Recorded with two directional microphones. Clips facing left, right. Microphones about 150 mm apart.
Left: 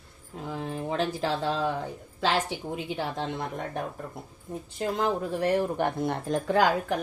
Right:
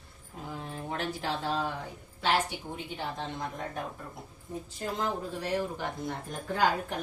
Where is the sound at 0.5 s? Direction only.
90° left; by 3.8 s 70° left (ahead or behind).